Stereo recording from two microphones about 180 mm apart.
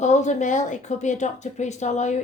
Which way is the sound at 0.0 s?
40° left (ahead or behind).